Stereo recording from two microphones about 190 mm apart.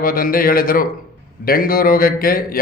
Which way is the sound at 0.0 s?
50° left (ahead or behind).